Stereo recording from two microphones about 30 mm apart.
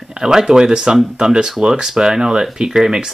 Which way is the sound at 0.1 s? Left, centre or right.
Right.